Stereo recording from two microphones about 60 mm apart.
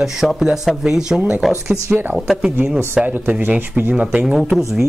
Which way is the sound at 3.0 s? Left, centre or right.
Right.